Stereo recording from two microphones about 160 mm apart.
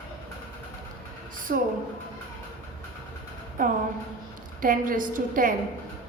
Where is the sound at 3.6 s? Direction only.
60° right (ahead or behind).